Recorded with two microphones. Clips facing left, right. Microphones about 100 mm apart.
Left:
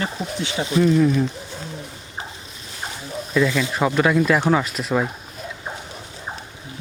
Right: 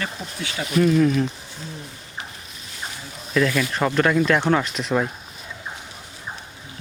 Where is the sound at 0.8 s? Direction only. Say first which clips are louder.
Left 1 dB; 5° left (ahead or behind).